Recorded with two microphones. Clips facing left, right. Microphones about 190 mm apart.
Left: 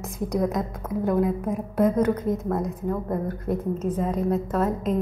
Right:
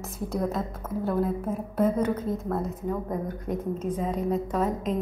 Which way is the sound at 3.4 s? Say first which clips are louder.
Left 3 dB; 10° left (ahead or behind).